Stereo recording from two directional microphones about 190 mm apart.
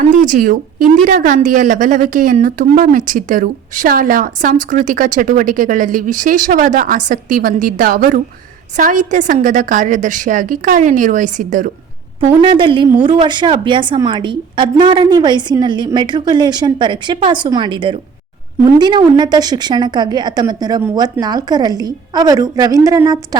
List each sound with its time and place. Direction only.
0.0 s a woman's voice: 45° right (ahead or behind)
12.2 s a woman's voice: 30° right (ahead or behind)